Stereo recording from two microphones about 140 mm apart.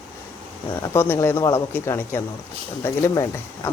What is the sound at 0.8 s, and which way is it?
Speech, 15° left (ahead or behind).